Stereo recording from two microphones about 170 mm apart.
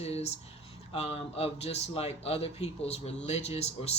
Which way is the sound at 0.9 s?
35° left (ahead or behind).